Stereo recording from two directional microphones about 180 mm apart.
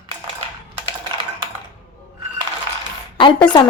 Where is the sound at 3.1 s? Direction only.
25° left (ahead or behind).